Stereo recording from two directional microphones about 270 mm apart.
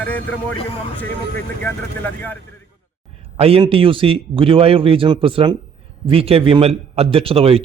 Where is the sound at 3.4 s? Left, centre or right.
Right.